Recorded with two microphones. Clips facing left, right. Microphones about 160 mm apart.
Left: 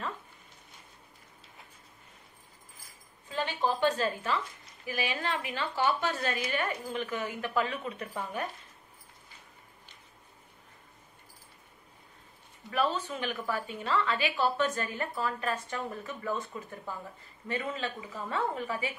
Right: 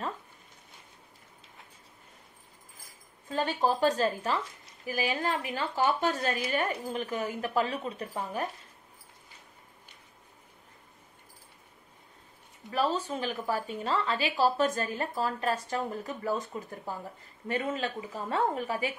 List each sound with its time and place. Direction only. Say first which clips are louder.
3.3 s a woman's voice: right 3 dB; 40° right (ahead or behind)
12.7 s a woman's voice: right 1 dB; 35° right (ahead or behind)